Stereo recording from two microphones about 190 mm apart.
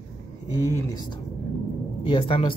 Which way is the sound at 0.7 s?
20° left (ahead or behind).